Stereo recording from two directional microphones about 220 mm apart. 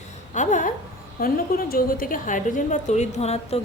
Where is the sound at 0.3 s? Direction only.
35° left (ahead or behind).